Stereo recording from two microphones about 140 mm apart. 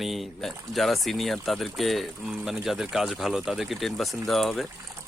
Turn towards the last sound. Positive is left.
turn(degrees=0)  # may be behind; listen again after turning